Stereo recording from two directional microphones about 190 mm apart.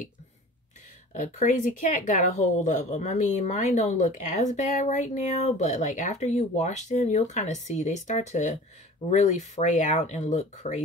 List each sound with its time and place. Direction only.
1.2 s speech: 45° left (ahead or behind)